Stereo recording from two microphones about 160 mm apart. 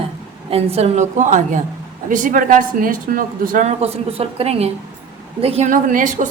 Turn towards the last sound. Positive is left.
turn(degrees=-55)  # may be behind; listen again after turning